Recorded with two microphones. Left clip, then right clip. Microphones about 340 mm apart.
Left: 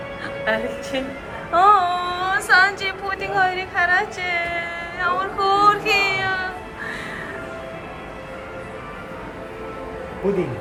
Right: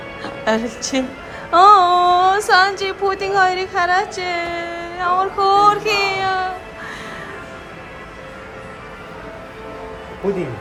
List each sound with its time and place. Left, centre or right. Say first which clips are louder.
0.2 s a woman's voice: right 3 dB; centre